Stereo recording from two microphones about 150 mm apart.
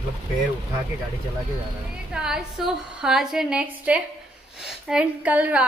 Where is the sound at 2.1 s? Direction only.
5° right (ahead or behind).